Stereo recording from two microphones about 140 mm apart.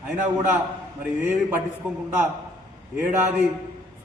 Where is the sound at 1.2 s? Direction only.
10° right (ahead or behind).